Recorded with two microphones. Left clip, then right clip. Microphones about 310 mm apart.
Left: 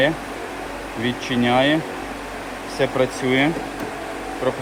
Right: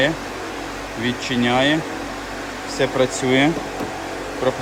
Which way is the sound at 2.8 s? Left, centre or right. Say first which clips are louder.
Right 1 dB; centre.